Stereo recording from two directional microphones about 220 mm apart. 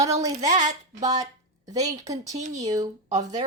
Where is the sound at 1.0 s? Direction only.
15° right (ahead or behind).